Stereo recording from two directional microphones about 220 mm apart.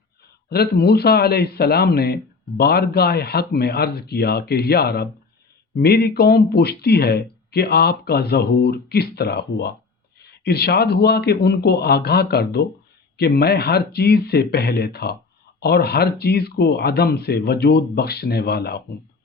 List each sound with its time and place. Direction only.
0.5 s speech: 45° left (ahead or behind)